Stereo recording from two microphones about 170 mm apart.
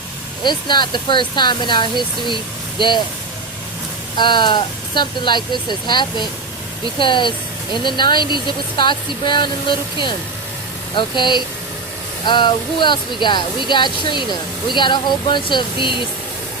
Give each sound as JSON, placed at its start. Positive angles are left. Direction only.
{"t": 0.4, "sound": "speech", "side_deg": 25}
{"t": 4.2, "sound": "speech", "side_deg": 30}